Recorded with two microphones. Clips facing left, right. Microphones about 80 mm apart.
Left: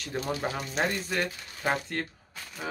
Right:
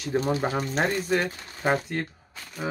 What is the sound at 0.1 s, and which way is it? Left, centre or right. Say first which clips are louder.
Speech: right 6 dB; right.